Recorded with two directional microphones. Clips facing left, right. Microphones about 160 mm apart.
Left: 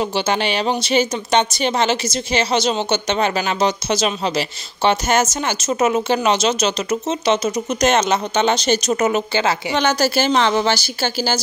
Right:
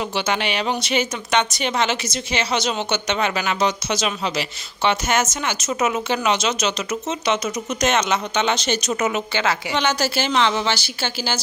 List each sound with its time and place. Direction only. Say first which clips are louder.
0.0 s speech: left 4 dB; 35° left (ahead or behind)
9.8 s speech: left 6 dB; 40° left (ahead or behind)